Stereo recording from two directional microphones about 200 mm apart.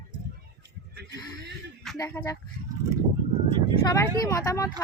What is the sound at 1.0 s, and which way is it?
Speech, 60° right (ahead or behind).